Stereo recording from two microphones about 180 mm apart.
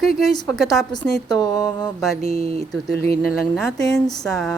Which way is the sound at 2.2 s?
35° right (ahead or behind).